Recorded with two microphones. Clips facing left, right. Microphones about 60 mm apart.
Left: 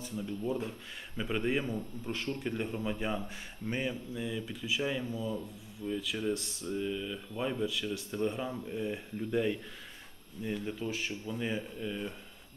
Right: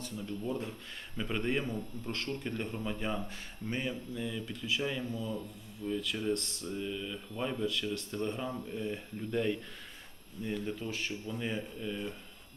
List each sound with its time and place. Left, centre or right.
0.2 s speech: centre